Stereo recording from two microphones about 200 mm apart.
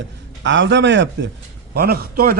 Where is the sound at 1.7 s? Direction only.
50° right (ahead or behind).